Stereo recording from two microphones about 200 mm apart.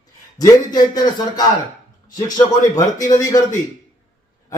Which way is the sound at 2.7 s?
15° left (ahead or behind).